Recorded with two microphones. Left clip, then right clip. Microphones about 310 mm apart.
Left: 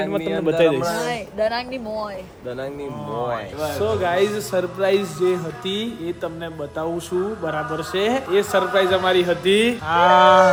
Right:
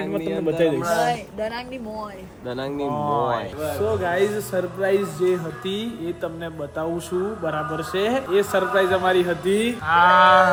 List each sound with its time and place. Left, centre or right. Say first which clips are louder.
0.1 s a man's voice: left 3 dB; centre
1.4 s speech: left 6 dB; left
2.7 s a man's voice: right 5 dB; centre